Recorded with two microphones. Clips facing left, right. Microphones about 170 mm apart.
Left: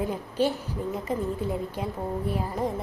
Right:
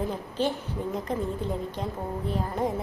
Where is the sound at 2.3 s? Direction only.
Centre (ahead or behind).